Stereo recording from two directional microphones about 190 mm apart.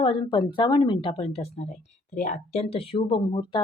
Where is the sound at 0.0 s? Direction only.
25° left (ahead or behind).